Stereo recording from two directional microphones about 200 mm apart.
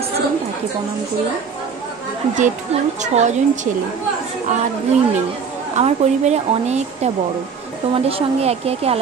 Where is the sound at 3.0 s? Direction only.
35° right (ahead or behind).